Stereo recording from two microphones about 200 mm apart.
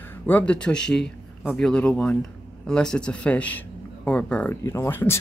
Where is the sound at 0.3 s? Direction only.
5° left (ahead or behind).